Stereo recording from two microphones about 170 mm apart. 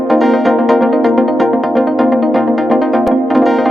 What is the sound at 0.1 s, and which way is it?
Music, centre (ahead or behind).